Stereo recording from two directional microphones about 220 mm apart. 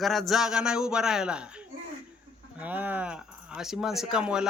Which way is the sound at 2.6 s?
10° right (ahead or behind).